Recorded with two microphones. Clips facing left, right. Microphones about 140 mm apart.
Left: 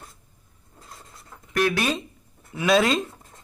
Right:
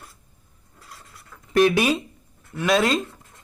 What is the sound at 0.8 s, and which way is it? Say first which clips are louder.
Filing: even; 25° left (ahead or behind).